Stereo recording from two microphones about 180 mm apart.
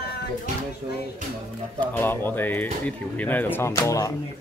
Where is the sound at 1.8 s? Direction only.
10° left (ahead or behind).